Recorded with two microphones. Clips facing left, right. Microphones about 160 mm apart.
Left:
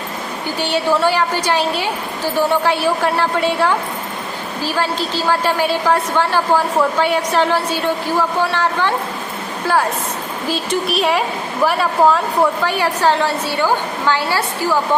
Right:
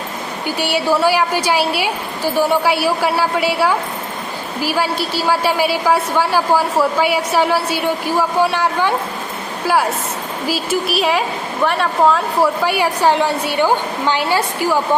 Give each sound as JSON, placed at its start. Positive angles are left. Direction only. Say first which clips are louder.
{"t": 0.6, "sound": "a woman's voice", "louder": "even", "side_deg": -10}
{"t": 10.4, "sound": "a woman's voice", "louder": "right 1 dB", "side_deg": -5}
{"t": 12.6, "sound": "a woman's voice", "louder": "right 1 dB", "side_deg": -10}